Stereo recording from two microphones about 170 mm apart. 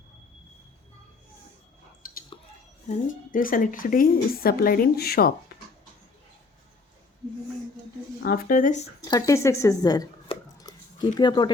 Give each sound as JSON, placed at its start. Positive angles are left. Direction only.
{"t": 3.1, "sound": "a woman's voice", "side_deg": 55}
{"t": 8.2, "sound": "speech", "side_deg": 55}
{"t": 9.0, "sound": "speech", "side_deg": 20}